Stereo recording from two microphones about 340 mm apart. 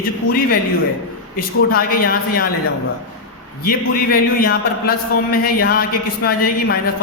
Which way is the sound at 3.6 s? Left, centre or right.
Left.